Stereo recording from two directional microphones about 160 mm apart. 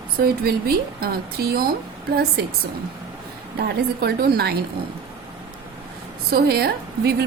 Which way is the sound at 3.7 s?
75° right (ahead or behind).